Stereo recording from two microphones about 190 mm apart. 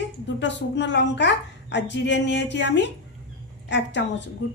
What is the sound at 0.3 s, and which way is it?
A woman's voice, 70° left (ahead or behind).